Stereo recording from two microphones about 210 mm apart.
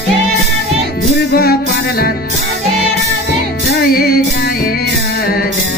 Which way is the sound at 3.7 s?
45° left (ahead or behind).